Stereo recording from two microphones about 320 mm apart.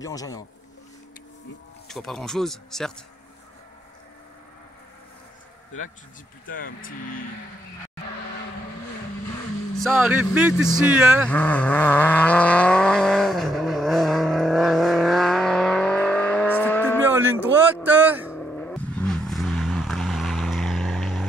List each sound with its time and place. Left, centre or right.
0.0 s speech: centre
1.9 s speech: centre
6.4 s speech: left
9.8 s vehicle: centre
17.1 s a sound: centre
18.3 s vehicle: centre